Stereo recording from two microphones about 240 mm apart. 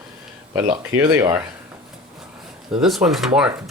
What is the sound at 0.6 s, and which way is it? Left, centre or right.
Speech, centre.